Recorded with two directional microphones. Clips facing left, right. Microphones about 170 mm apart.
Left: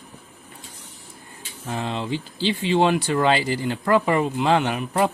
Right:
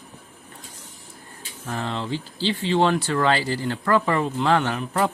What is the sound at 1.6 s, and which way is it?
Speech, 15° left (ahead or behind).